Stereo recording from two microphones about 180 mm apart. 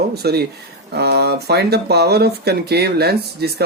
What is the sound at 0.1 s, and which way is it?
Speech, 60° right (ahead or behind).